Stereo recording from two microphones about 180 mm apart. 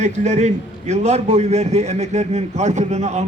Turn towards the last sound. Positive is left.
turn(degrees=-40)  # may be behind; listen again after turning